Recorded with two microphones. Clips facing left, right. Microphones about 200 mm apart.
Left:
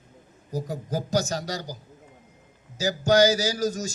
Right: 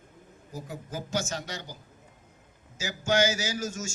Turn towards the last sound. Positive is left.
turn(degrees=35)  # may be behind; listen again after turning